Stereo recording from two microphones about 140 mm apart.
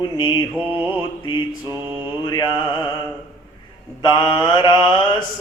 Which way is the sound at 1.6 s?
20° right (ahead or behind).